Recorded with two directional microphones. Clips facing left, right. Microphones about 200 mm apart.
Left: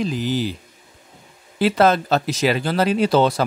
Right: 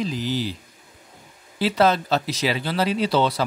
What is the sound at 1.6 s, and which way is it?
A man's voice, 50° left (ahead or behind).